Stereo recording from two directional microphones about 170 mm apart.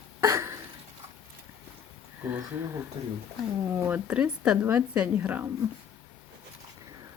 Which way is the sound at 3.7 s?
10° right (ahead or behind).